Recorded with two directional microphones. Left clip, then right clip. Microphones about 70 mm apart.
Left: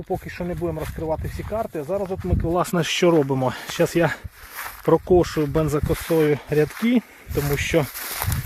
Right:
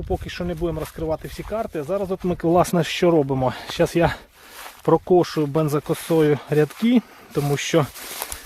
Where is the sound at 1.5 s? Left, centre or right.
Right.